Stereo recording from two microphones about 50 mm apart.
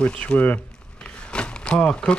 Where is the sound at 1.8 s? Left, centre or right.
Centre.